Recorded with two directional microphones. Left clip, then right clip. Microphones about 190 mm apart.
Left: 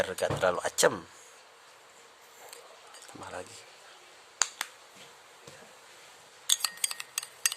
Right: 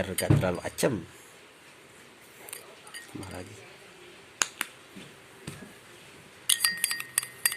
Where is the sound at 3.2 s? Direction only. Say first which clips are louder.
Left 3 dB; 20° left (ahead or behind).